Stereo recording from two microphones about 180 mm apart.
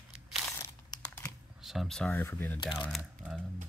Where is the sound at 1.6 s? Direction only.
Centre (ahead or behind).